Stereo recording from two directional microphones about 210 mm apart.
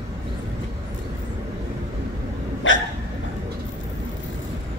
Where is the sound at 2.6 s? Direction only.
65° left (ahead or behind).